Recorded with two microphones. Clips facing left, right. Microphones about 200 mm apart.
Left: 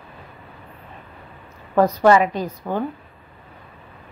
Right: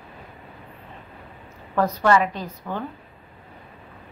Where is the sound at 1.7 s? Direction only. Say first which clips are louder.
Left 5 dB; 15° left (ahead or behind).